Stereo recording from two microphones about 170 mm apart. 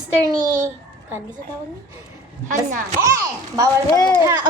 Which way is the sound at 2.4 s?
50° right (ahead or behind).